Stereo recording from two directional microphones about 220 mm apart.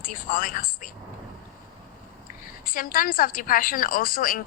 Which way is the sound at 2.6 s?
40° left (ahead or behind).